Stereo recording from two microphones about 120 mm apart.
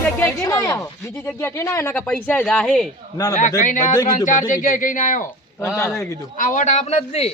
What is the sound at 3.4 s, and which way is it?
Speech, 90° left.